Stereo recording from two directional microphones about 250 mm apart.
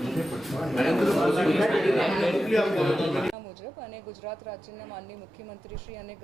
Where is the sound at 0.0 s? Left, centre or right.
Centre.